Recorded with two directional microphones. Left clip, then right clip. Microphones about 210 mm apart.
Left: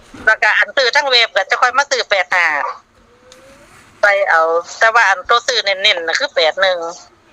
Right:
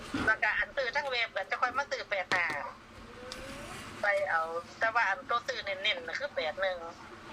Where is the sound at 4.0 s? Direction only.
50° left (ahead or behind).